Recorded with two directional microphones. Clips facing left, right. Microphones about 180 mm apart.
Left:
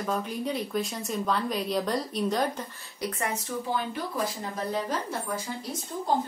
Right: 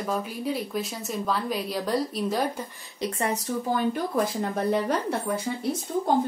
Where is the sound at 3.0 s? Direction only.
30° right (ahead or behind).